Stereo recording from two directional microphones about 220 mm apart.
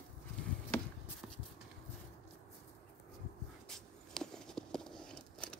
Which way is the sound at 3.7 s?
Centre (ahead or behind).